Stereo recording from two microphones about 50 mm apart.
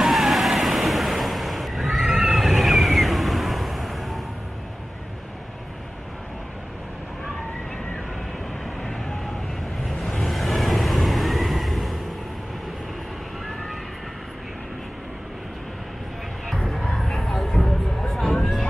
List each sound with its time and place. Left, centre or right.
0.0 s vehicle: centre
10.0 s vehicle: centre
16.8 s music: centre